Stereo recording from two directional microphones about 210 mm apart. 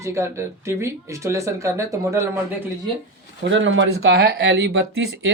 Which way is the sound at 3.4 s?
60° right (ahead or behind).